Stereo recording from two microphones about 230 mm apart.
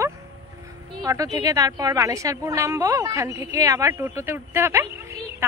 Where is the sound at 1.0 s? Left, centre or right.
Centre.